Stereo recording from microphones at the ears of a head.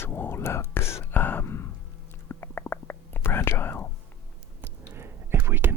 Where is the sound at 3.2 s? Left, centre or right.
Left.